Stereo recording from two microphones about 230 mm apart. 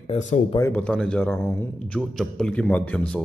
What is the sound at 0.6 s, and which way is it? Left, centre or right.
A man's voice, centre.